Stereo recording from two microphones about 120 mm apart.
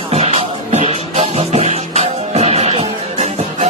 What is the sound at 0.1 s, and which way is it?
Music, 60° right (ahead or behind).